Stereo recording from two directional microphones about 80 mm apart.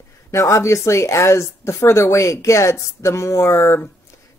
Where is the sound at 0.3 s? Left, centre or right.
Left.